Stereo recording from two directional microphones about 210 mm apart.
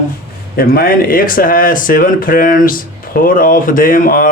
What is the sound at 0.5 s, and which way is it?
Speech, 45° left (ahead or behind).